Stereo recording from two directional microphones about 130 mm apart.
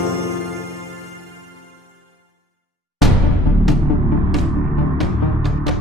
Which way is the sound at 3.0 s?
Centre (ahead or behind).